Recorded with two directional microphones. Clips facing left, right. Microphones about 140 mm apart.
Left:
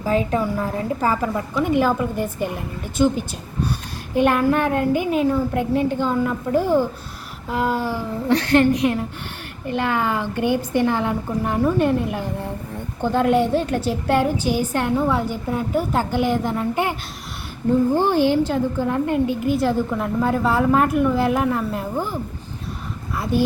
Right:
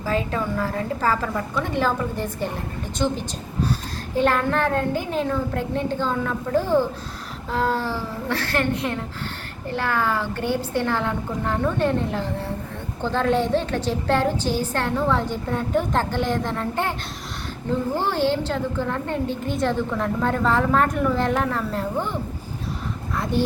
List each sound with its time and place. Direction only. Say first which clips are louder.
0.0 s a woman's voice: left 4 dB; 20° left (ahead or behind)
17.9 s a woman's voice: left 5 dB; 15° left (ahead or behind)
23.1 s a sound: left 2 dB; 5° left (ahead or behind)